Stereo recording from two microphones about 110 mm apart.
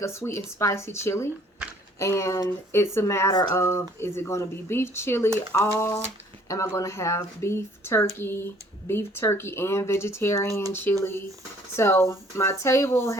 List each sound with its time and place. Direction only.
0.0 s speech: 25° left (ahead or behind)